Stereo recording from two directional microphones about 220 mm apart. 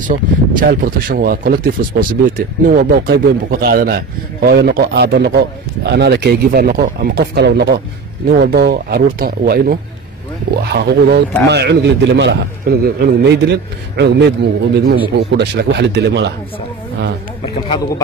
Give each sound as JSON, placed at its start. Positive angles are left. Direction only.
{"t": 0.0, "sound": "speech", "side_deg": -35}
{"t": 17.6, "sound": "speech", "side_deg": 15}